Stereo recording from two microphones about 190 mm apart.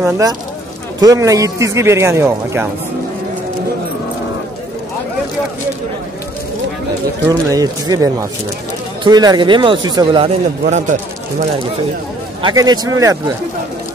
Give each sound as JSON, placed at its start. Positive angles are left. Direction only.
{"t": 0.0, "sound": "a man's voice", "side_deg": -20}
{"t": 7.2, "sound": "speech", "side_deg": -20}
{"t": 12.4, "sound": "speech", "side_deg": -20}